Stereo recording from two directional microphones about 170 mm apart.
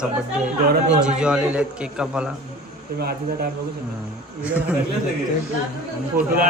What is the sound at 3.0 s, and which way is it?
Speech, 65° right (ahead or behind).